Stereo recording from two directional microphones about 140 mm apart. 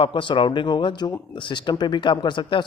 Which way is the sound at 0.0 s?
35° left (ahead or behind).